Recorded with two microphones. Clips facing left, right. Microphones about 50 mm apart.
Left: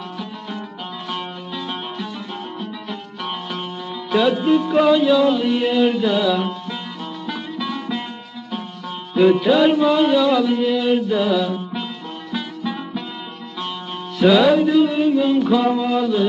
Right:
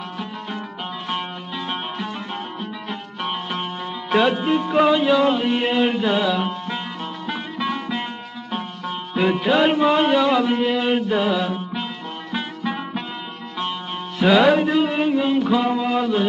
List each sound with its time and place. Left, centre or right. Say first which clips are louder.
1.0 s music: even; right